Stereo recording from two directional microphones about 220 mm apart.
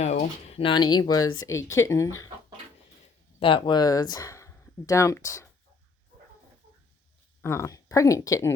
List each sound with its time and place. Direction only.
0.0 s speech: 30° left (ahead or behind); by 2.3 s 15° left (ahead or behind)
3.4 s speech: 20° left (ahead or behind)
7.4 s speech: 10° left (ahead or behind)